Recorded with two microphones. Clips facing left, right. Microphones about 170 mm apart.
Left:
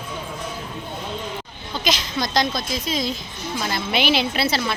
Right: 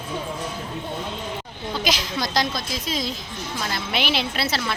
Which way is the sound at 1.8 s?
5° right (ahead or behind).